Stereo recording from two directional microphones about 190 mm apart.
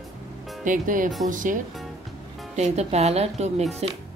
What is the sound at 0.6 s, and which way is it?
Speech, 45° right (ahead or behind).